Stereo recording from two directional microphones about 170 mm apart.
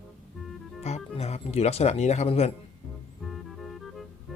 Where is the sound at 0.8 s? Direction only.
40° left (ahead or behind).